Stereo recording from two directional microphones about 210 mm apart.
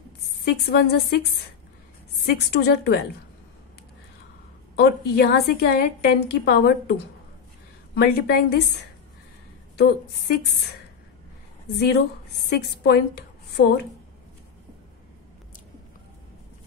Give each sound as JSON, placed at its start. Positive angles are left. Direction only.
{"t": 0.7, "sound": "a woman's voice", "side_deg": 50}
{"t": 2.2, "sound": "a woman's voice", "side_deg": 50}
{"t": 4.7, "sound": "a woman's voice", "side_deg": 50}
{"t": 9.8, "sound": "a woman's voice", "side_deg": 50}
{"t": 11.7, "sound": "a woman's voice", "side_deg": 50}